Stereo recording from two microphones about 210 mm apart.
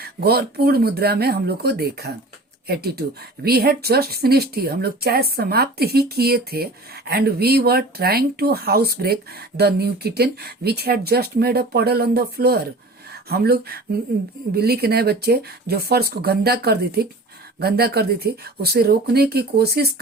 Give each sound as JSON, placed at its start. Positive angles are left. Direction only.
{"t": 0.0, "sound": "a woman's voice", "side_deg": -45}